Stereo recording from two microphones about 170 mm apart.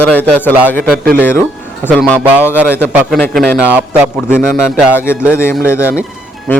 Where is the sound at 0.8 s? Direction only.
60° right (ahead or behind).